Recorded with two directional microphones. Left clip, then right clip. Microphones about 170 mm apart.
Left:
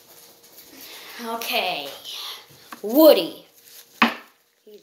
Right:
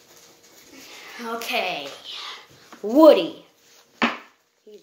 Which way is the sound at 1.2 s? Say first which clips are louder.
Left 1 dB; 20° right (ahead or behind).